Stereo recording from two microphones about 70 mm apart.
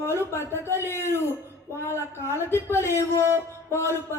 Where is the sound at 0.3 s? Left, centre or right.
Left.